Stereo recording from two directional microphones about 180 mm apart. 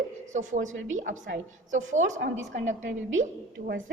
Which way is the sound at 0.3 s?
40° right (ahead or behind).